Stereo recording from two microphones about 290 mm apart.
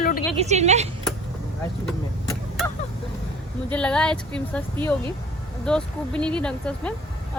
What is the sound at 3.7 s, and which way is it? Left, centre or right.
Speech, centre.